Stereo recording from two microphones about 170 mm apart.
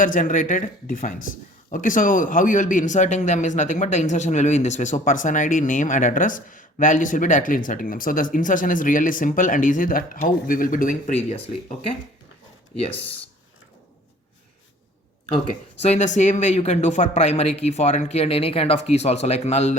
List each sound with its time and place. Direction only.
0.0 s speech: 50° left (ahead or behind); by 13.1 s 35° left (ahead or behind)
15.8 s speech: 40° left (ahead or behind)